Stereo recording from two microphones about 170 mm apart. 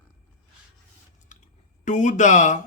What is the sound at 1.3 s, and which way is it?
Chewing, 50° left (ahead or behind).